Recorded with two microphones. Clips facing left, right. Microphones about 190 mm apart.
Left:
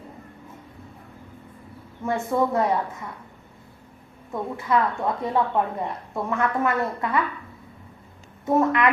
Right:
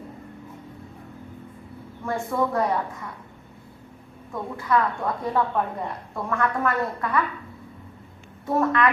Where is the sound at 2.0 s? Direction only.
20° left (ahead or behind).